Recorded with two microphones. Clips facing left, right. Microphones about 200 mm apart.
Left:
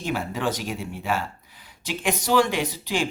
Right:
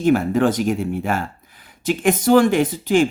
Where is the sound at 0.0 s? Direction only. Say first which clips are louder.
Right 11 dB; 50° right (ahead or behind).